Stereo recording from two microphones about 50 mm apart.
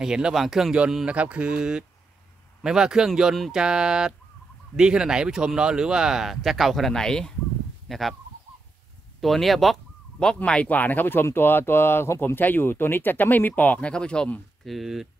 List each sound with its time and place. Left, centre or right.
0.0 s speech: centre
1.0 s mantra: right
2.6 s speech: centre
7.9 s speech: centre
9.2 s speech: centre
10.1 s speech: centre
10.7 s speech: left
12.4 s speech: left; by 14.3 s centre
14.6 s speech: centre